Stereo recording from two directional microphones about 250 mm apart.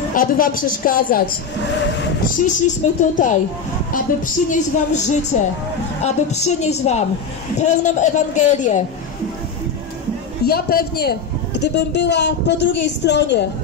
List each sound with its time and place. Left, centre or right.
0.1 s a woman's voice: left
2.3 s a man's voice: left
4.5 s a man's voice: left
10.4 s a woman's voice: left